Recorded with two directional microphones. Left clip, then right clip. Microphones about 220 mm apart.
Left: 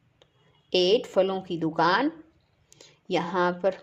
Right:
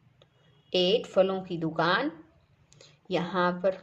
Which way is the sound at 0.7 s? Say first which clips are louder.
Left 3 dB; 35° left (ahead or behind).